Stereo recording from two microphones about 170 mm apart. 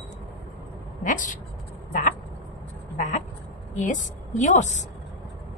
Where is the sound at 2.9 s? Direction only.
45° left (ahead or behind).